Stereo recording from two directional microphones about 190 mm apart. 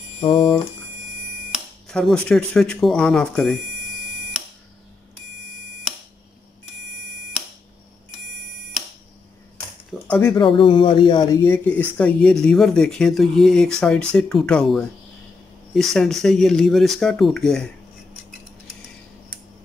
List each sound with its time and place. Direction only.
0.2 s speech: 25° left (ahead or behind)
1.5 s speech: 5° left (ahead or behind)
9.8 s a sound: 5° left (ahead or behind)
10.3 s speech: 25° left (ahead or behind)
11.4 s speech: 10° left (ahead or behind)